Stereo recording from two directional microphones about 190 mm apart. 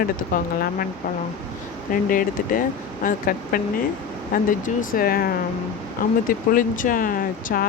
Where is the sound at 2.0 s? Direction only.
45° left (ahead or behind).